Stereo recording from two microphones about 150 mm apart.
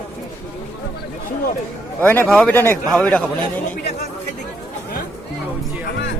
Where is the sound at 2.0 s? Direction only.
15° left (ahead or behind).